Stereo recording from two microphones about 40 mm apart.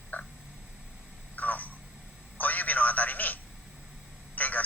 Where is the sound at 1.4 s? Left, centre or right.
Left.